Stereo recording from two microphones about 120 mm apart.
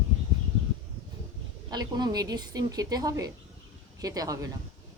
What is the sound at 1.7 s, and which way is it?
Speech, 35° right (ahead or behind).